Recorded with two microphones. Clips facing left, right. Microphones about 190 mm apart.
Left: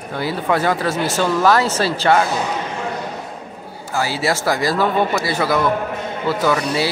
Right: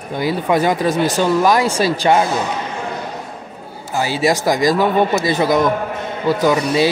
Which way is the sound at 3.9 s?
15° right (ahead or behind).